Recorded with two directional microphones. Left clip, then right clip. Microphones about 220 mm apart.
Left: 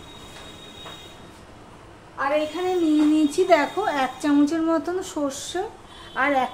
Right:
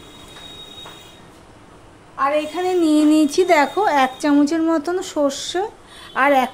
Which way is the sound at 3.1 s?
40° right (ahead or behind).